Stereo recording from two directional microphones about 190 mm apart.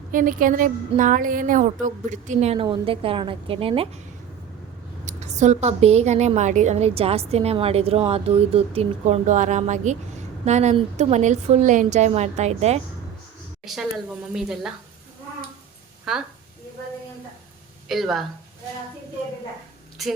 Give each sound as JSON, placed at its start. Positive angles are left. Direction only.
{"t": 0.1, "sound": "a woman's voice", "side_deg": -45}
{"t": 5.0, "sound": "a woman's voice", "side_deg": -40}
{"t": 13.7, "sound": "speech", "side_deg": 0}
{"t": 17.8, "sound": "speech", "side_deg": 0}